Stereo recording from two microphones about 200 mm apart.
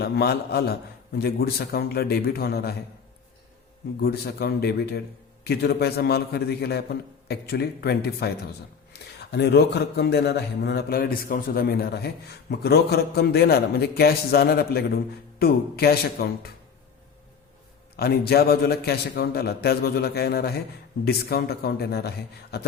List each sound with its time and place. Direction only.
0.0 s speech: 55° left (ahead or behind)
4.0 s speech: 50° left (ahead or behind)
17.9 s speech: 50° left (ahead or behind)